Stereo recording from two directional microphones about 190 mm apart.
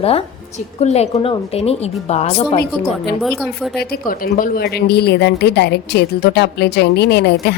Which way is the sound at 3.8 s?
50° left (ahead or behind).